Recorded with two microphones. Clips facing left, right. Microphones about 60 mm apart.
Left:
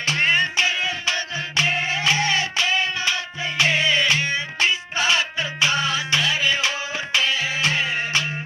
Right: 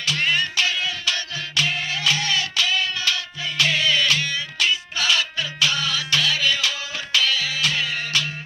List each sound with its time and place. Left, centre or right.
0.0 s music: left